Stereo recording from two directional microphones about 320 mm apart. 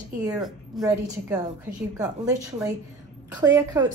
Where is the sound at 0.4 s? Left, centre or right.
Centre.